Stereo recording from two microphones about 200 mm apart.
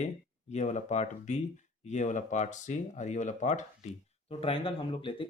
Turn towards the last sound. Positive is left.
turn(degrees=25)  # may be behind; listen again after turning